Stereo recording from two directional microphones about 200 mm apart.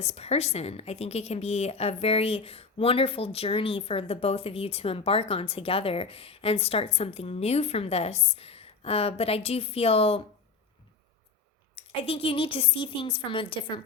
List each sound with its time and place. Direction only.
0.1 s a woman's voice: 30° left (ahead or behind)
11.9 s a woman's voice: 30° left (ahead or behind)